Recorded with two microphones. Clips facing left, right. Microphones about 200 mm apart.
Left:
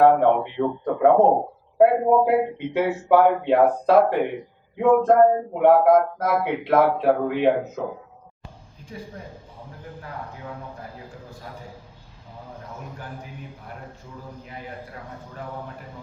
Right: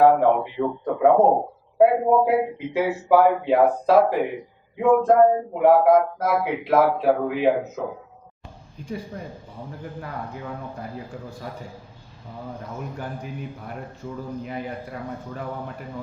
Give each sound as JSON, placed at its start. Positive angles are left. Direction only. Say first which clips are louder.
{"t": 0.0, "sound": "a man's voice", "louder": "even", "side_deg": 0}